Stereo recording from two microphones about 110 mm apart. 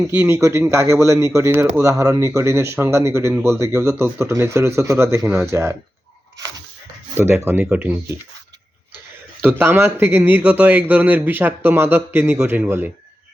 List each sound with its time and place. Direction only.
0.1 s speech: 15° right (ahead or behind)
0.3 s speech: 25° right (ahead or behind)
7.2 s speech: 20° right (ahead or behind)
9.4 s speech: 20° right (ahead or behind)